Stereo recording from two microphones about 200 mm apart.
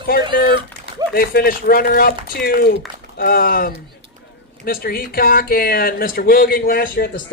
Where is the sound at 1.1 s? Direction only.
50° left (ahead or behind).